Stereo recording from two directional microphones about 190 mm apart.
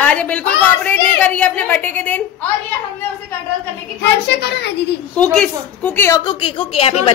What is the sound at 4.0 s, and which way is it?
Speech, 60° left (ahead or behind).